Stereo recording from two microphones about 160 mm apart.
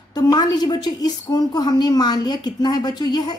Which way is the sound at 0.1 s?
25° left (ahead or behind).